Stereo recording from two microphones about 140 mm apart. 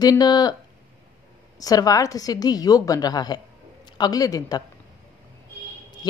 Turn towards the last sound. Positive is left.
turn(degrees=25)  # may be behind; listen again after turning